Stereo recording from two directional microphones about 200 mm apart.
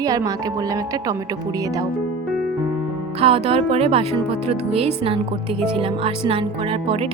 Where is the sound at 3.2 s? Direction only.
30° right (ahead or behind).